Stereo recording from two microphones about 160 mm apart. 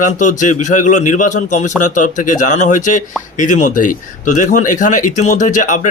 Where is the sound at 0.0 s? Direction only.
50° left (ahead or behind).